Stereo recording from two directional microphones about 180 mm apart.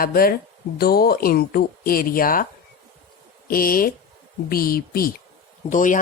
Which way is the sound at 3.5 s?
55° left (ahead or behind).